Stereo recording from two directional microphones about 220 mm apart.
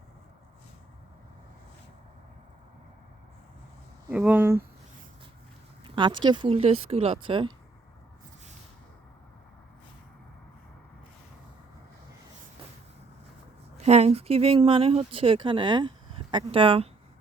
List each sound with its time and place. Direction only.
4.1 s speech: 5° right (ahead or behind)
6.2 s speech: 20° right (ahead or behind)
13.7 s speech: 30° right (ahead or behind)